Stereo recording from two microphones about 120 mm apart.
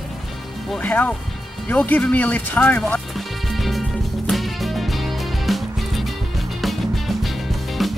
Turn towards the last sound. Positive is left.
turn(degrees=0)  # may be behind; listen again after turning